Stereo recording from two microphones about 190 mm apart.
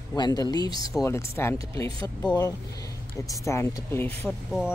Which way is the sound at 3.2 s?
15° left (ahead or behind).